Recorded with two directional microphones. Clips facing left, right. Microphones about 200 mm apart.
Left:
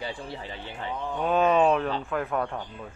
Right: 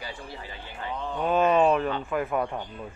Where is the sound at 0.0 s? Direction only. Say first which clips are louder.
Left 4 dB; 25° left (ahead or behind).